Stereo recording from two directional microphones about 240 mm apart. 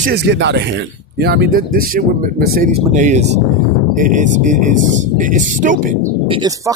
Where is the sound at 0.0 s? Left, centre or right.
Right.